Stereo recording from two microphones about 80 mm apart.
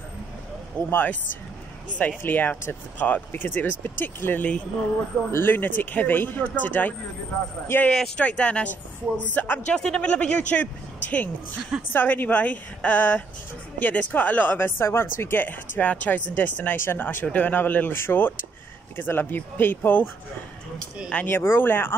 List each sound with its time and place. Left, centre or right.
0.8 s speech: left
21.3 s speech: left